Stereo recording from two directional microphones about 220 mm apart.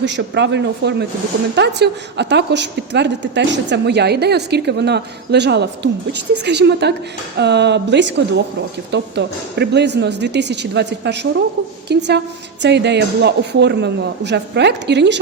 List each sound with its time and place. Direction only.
0.0 s a woman's voice: 50° right (ahead or behind)